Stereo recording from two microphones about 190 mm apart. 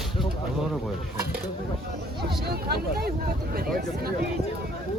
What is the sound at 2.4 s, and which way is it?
Speech, 55° right (ahead or behind).